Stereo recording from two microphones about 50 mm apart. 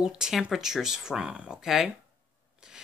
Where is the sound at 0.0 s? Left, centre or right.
Centre.